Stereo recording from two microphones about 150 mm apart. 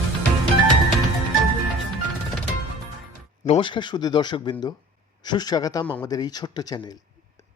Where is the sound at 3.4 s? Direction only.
40° left (ahead or behind).